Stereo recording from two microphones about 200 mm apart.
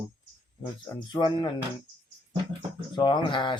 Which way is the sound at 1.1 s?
25° left (ahead or behind).